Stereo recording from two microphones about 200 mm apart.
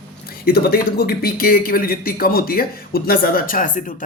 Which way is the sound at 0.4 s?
50° left (ahead or behind).